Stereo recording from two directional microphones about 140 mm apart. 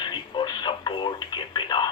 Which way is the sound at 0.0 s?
35° left (ahead or behind).